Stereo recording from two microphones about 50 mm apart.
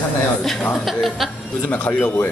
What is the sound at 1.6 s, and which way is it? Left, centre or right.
Speech, left.